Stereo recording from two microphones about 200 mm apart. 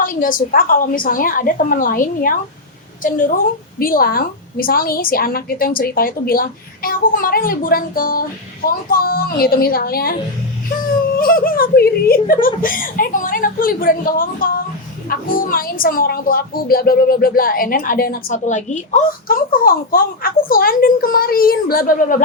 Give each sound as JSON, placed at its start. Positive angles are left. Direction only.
{"t": 0.0, "sound": "a woman's voice", "side_deg": 45}
{"t": 11.2, "sound": "a woman's voice", "side_deg": 45}